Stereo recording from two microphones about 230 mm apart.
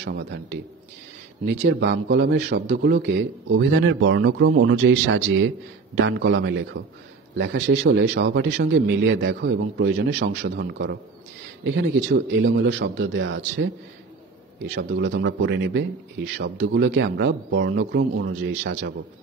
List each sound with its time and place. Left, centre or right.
0.0 s a man's voice: right